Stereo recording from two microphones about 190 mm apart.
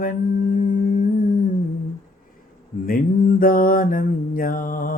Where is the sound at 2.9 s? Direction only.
45° left (ahead or behind).